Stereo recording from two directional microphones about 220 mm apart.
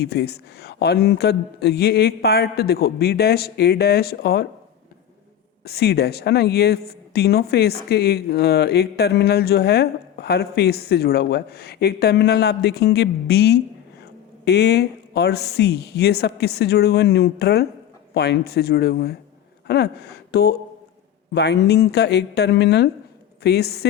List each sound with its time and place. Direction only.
0.0 s a woman's voice: 50° left (ahead or behind)
5.6 s a woman's voice: 45° left (ahead or behind)